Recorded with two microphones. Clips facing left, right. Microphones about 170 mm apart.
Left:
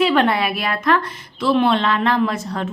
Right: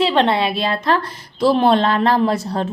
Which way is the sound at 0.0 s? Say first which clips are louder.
Right 1 dB; 25° right (ahead or behind).